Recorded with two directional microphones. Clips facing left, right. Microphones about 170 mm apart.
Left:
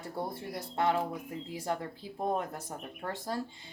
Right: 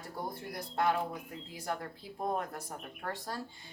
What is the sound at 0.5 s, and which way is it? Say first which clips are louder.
A woman's voice: left 1 dB; 25° left (ahead or behind).